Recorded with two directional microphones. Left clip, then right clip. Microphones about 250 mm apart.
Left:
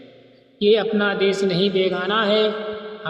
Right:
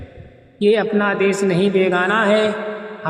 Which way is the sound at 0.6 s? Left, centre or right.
Right.